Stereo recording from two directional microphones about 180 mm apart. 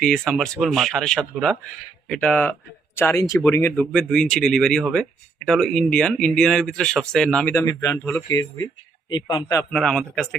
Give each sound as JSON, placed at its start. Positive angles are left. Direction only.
{"t": 0.0, "sound": "speech", "side_deg": 5}
{"t": 9.7, "sound": "speech", "side_deg": 5}